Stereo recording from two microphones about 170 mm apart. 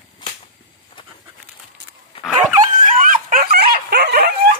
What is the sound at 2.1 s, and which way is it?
Dog, 30° left (ahead or behind).